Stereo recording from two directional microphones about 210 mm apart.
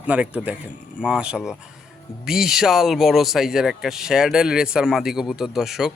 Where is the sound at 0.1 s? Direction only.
5° right (ahead or behind).